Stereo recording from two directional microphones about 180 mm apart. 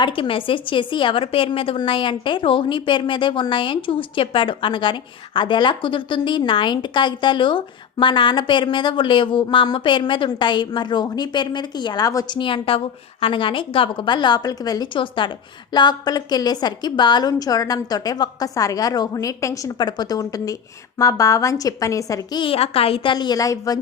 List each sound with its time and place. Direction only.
0.0 s a woman's voice: 30° left (ahead or behind)